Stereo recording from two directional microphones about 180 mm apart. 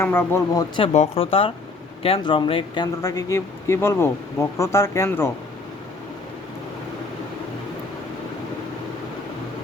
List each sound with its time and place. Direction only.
0.0 s speech: 10° left (ahead or behind)
0.8 s speech: 30° left (ahead or behind); by 5.3 s 15° left (ahead or behind)